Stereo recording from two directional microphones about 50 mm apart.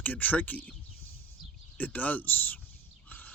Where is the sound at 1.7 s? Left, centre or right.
Left.